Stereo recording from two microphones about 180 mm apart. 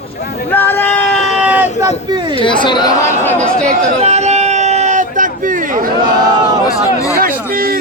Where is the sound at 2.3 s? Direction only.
30° left (ahead or behind).